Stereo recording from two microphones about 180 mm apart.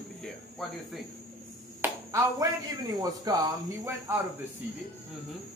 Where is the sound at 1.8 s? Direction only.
15° right (ahead or behind).